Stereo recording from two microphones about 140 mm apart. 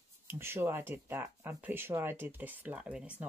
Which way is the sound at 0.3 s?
15° right (ahead or behind).